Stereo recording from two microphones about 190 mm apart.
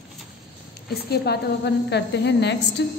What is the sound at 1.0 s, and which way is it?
A woman's voice, 60° left (ahead or behind).